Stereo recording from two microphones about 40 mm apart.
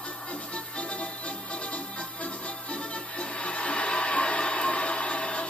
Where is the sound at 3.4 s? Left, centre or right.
Left.